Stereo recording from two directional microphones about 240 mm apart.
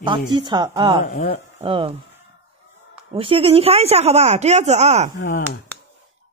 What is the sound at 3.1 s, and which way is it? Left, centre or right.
Speech, right.